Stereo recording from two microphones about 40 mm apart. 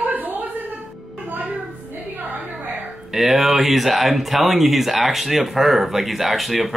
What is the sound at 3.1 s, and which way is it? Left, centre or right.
Speech, centre.